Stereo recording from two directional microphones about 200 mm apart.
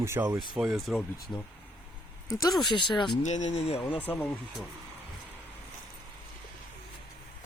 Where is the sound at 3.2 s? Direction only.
35° left (ahead or behind).